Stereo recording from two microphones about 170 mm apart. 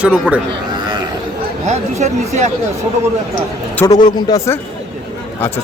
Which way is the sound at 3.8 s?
25° left (ahead or behind).